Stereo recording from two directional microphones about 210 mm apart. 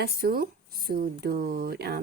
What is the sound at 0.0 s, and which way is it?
Speech, 45° right (ahead or behind).